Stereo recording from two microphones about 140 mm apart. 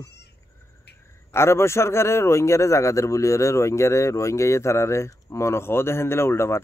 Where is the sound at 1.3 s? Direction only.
20° left (ahead or behind).